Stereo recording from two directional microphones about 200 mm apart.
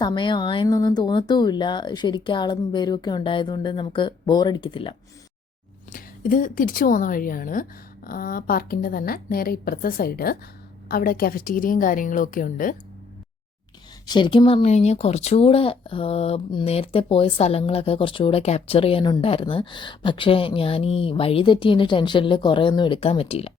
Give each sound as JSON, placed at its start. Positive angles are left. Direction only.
{"t": 0.0, "sound": "speech", "side_deg": 25}
{"t": 5.9, "sound": "speech", "side_deg": 45}
{"t": 14.1, "sound": "speech", "side_deg": 25}